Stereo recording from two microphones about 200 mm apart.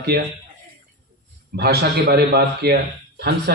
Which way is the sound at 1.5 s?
55° right (ahead or behind).